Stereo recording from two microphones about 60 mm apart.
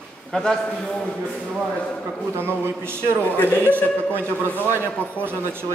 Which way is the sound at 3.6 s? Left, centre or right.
Right.